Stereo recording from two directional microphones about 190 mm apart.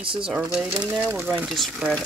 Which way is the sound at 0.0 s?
25° right (ahead or behind).